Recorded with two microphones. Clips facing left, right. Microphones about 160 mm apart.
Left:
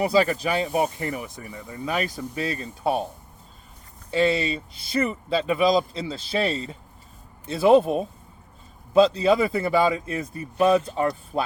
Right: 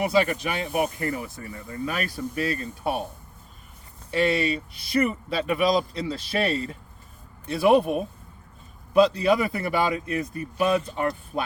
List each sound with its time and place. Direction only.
0.0 s speech: 35° left (ahead or behind)
4.1 s speech: 25° left (ahead or behind)